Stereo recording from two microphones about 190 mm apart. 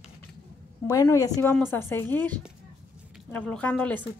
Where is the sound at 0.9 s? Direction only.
15° left (ahead or behind).